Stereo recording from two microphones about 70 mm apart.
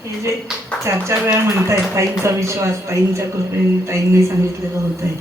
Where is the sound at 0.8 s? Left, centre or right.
Right.